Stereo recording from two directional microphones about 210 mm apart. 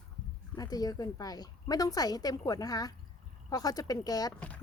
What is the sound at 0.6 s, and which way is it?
A woman's voice, 15° left (ahead or behind).